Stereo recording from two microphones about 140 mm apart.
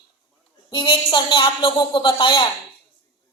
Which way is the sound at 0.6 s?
35° left (ahead or behind).